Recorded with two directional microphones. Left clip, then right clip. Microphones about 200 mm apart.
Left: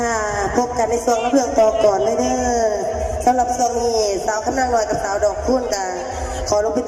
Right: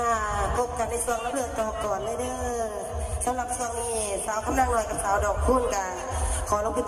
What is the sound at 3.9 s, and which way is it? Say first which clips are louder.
A man's voice: left 11 dB; 30° left (ahead or behind).